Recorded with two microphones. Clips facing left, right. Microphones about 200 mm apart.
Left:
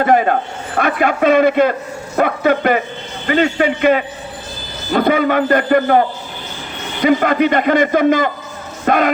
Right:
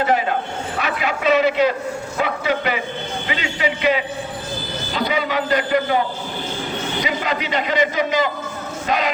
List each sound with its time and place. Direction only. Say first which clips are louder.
0.0 s a man's voice: left 6 dB; 50° left (ahead or behind)